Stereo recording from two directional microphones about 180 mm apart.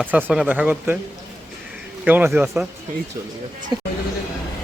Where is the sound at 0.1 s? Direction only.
10° right (ahead or behind).